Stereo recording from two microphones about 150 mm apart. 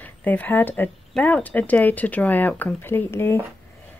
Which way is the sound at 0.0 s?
10° left (ahead or behind).